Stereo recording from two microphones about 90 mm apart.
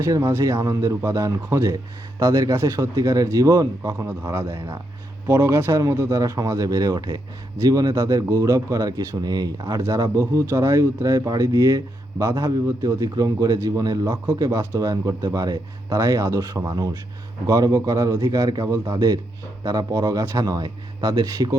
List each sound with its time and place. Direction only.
0.0 s a man's voice: 30° right (ahead or behind)
18.9 s speech: 50° right (ahead or behind)